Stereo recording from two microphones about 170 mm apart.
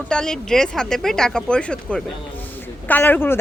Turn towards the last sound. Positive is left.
turn(degrees=10)  # may be behind; listen again after turning